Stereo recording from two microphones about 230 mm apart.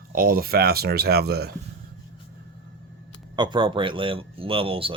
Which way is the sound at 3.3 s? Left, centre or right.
Centre.